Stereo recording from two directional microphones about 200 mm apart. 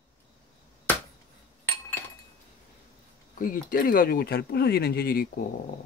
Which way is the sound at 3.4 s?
45° left (ahead or behind).